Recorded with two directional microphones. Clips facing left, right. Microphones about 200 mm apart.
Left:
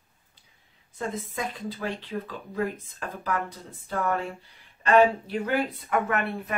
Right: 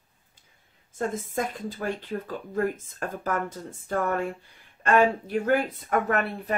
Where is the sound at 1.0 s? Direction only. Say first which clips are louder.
Right 3 dB; 45° right (ahead or behind).